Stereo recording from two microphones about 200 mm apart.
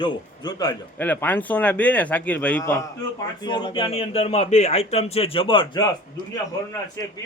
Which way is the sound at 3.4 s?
20° left (ahead or behind).